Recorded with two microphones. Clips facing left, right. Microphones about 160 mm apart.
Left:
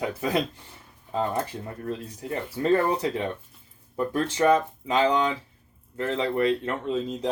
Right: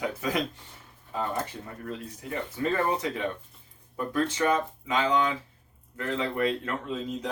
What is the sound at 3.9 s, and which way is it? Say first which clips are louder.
Speech: left 2 dB; 30° left (ahead or behind).